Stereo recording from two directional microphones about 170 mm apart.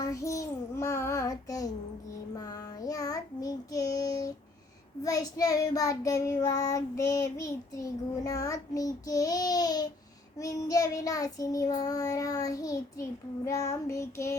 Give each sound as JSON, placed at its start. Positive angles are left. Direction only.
{"t": 0.0, "sound": "child singing", "side_deg": 20}